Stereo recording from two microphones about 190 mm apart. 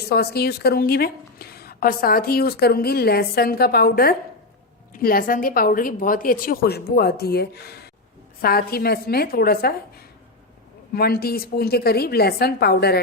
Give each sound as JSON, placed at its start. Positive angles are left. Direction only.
{"t": 0.1, "sound": "a woman's voice", "side_deg": 55}
{"t": 10.9, "sound": "a woman's voice", "side_deg": 55}